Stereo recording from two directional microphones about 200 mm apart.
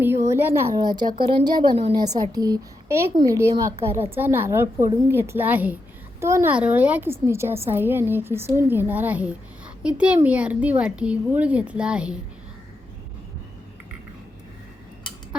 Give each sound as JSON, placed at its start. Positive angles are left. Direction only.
{"t": 0.0, "sound": "a woman's voice", "side_deg": -15}